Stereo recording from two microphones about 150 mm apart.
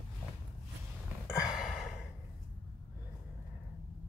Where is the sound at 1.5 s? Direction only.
5° right (ahead or behind).